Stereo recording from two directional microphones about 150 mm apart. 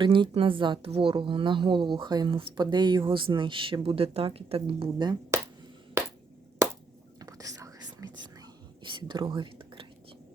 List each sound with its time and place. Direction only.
0.0 s a woman's voice: 35° right (ahead or behind)
7.2 s whispering: 25° right (ahead or behind)